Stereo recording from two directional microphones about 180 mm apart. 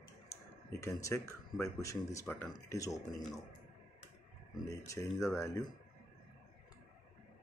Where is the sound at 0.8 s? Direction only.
15° left (ahead or behind).